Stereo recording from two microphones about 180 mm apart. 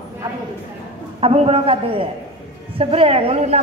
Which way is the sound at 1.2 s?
35° right (ahead or behind).